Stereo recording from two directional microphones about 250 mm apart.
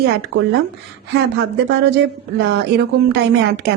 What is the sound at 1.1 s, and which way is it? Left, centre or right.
A woman's voice, right.